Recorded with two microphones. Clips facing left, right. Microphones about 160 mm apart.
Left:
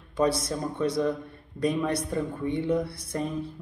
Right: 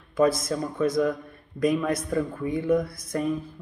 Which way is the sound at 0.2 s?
30° left (ahead or behind).